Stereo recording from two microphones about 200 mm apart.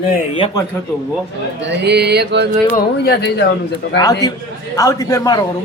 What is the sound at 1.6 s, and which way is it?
Mantra, 55° right (ahead or behind).